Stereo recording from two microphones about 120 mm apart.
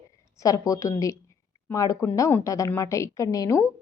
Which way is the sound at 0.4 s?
30° left (ahead or behind).